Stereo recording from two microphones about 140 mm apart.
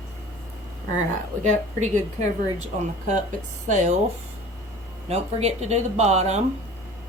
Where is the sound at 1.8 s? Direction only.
60° right (ahead or behind).